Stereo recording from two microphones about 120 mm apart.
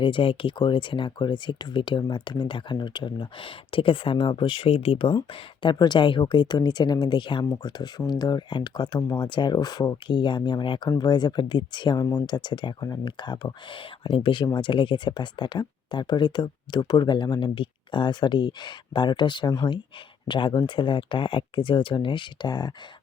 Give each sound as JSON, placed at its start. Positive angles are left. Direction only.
{"t": 0.0, "sound": "speech", "side_deg": 45}